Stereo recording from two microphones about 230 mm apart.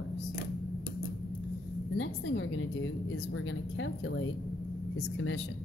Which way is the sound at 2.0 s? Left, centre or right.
Left.